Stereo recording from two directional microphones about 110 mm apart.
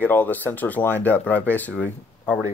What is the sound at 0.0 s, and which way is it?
Speech, 15° left (ahead or behind).